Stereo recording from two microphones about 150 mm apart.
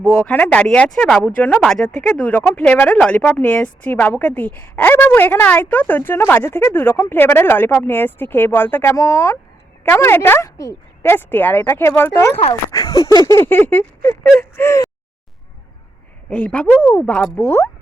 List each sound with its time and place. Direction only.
0.1 s speech: 5° left (ahead or behind)
16.3 s speech: 10° left (ahead or behind)